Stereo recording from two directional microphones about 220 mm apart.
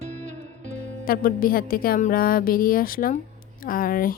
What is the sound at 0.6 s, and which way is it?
A woman's voice, 40° left (ahead or behind).